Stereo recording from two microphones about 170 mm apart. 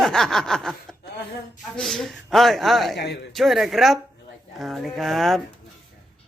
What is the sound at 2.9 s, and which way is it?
Speech, 75° left (ahead or behind).